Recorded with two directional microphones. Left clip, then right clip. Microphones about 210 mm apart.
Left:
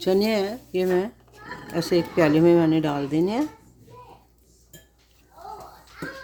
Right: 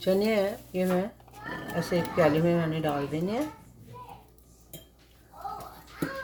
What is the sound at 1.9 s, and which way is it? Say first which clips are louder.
Speech: left 4 dB; 55° left (ahead or behind).